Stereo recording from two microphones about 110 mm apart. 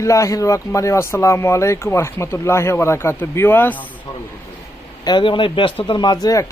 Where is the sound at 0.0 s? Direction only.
30° left (ahead or behind).